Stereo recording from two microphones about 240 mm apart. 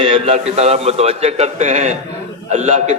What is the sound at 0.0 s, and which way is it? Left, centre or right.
A man's voice, right.